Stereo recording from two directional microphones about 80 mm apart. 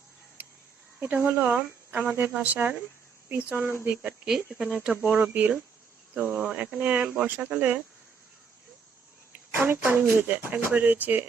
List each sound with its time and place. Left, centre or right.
0.9 s speech: right
4.3 s speech: centre
5.1 s speech: right
9.3 s speech: right